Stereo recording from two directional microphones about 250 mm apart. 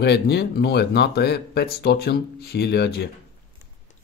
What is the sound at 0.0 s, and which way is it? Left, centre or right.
Speech, left.